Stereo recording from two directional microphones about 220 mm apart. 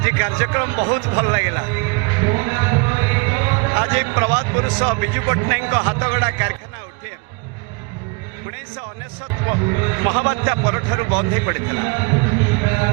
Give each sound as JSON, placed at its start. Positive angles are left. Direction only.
{"t": 0.0, "sound": "a man's voice", "side_deg": -15}
{"t": 9.4, "sound": "a man's voice", "side_deg": -20}